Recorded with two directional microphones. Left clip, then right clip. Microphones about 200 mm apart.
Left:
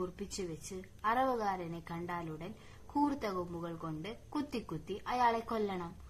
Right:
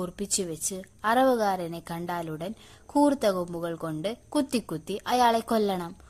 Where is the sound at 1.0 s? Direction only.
40° right (ahead or behind).